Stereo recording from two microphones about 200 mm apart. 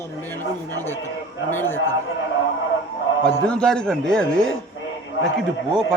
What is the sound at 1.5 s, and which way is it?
Speech, 10° left (ahead or behind).